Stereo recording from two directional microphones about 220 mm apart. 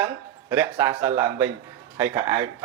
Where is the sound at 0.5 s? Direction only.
10° right (ahead or behind).